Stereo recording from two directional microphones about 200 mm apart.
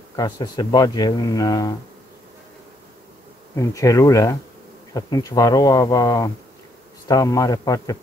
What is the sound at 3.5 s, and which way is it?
A man's voice, 15° left (ahead or behind).